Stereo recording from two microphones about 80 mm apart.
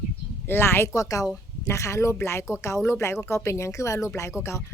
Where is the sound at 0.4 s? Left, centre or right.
Left.